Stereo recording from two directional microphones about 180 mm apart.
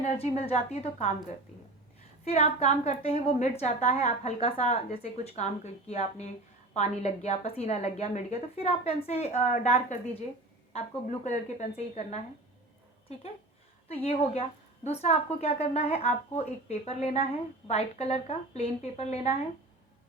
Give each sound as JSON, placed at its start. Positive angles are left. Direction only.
{"t": 0.0, "sound": "a woman's voice", "side_deg": 35}
{"t": 2.2, "sound": "a woman's voice", "side_deg": 35}
{"t": 13.8, "sound": "a woman's voice", "side_deg": 35}